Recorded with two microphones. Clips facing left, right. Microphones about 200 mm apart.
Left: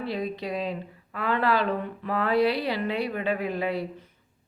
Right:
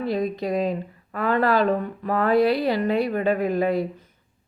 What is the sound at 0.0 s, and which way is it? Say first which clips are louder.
Speech: right 6 dB; 45° right (ahead or behind).